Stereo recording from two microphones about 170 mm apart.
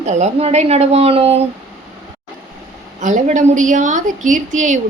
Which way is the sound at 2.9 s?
45° right (ahead or behind).